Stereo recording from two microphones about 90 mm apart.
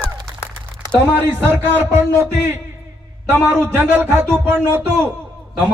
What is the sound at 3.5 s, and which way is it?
Speech, 25° right (ahead or behind).